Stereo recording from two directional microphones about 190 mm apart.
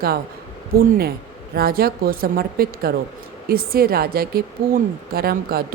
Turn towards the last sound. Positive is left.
turn(degrees=-55)  # may be behind; listen again after turning